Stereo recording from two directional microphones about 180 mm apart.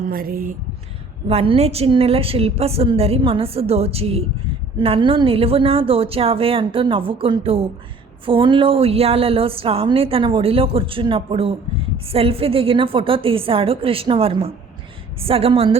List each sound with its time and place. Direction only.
0.1 s speech: 55° right (ahead or behind)
1.3 s a woman's voice: 35° right (ahead or behind)